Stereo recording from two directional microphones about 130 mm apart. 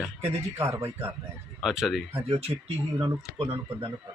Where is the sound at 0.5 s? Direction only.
20° right (ahead or behind).